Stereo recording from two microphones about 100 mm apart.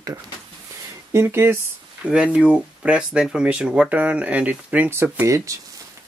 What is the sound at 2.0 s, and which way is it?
Speech, 10° right (ahead or behind).